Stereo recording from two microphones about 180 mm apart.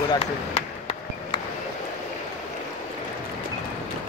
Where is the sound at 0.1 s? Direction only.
30° left (ahead or behind).